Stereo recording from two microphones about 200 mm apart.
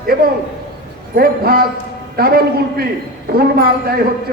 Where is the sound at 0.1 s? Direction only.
50° right (ahead or behind).